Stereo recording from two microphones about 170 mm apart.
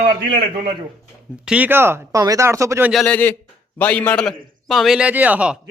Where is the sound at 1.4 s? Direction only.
10° right (ahead or behind).